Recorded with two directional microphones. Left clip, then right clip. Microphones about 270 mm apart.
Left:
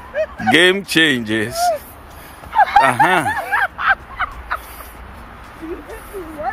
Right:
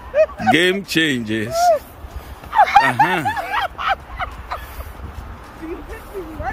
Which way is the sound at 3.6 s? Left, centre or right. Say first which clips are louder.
Left 4 dB; right.